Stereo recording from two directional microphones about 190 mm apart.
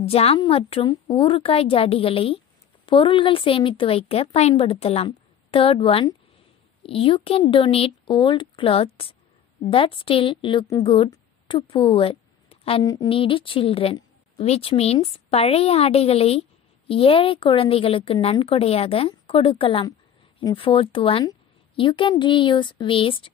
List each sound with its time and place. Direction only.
0.0 s a woman's voice: 30° left (ahead or behind)
12.8 s a woman's voice: 20° left (ahead or behind)